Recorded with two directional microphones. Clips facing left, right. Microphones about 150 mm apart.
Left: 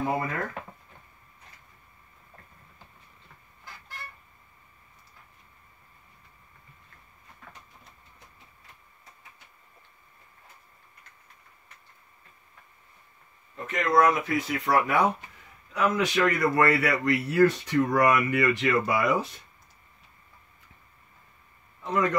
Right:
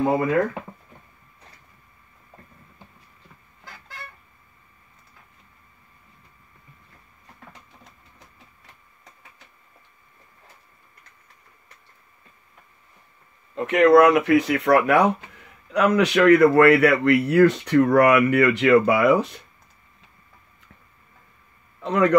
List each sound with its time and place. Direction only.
13.6 s a man's voice: 75° right (ahead or behind)
21.8 s a man's voice: 70° right (ahead or behind)